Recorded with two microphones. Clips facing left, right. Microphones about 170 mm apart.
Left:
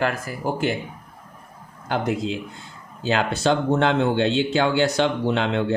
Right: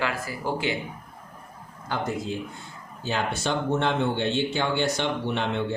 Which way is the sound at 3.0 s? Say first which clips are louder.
Left 6 dB; 90° left.